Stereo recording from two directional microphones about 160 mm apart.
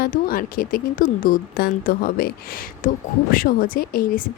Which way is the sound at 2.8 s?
60° left (ahead or behind).